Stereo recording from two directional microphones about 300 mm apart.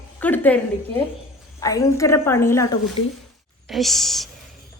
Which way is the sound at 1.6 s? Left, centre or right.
Centre.